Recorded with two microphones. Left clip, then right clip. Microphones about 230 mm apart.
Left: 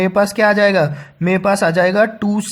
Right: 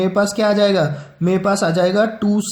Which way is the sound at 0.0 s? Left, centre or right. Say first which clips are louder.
Left 3 dB; left.